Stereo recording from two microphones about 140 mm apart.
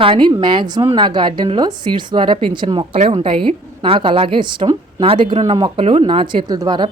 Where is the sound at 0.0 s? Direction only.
35° right (ahead or behind).